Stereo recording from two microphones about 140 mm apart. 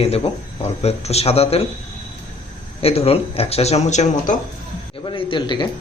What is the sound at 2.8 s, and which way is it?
Speech, 45° left (ahead or behind).